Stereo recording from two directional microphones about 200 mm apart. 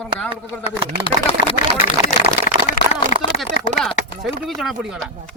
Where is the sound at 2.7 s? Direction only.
40° left (ahead or behind).